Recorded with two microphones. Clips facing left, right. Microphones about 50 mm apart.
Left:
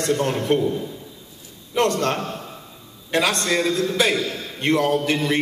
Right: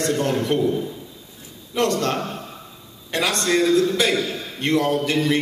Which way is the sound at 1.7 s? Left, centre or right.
Left.